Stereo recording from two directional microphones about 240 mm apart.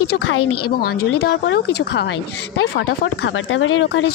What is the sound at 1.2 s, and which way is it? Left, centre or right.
Speech, left.